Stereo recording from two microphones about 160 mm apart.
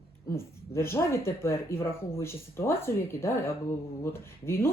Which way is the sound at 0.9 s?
15° left (ahead or behind).